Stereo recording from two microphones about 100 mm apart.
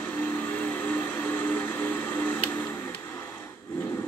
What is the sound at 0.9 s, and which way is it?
Vehicle, 15° left (ahead or behind).